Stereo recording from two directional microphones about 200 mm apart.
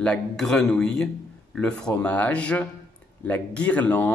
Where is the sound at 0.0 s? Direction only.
5° left (ahead or behind).